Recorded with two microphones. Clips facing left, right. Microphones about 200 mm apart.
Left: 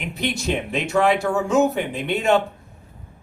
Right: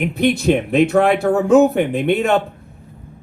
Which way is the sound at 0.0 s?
55° right (ahead or behind).